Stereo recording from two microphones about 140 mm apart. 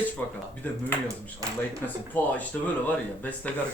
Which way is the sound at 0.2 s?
10° left (ahead or behind).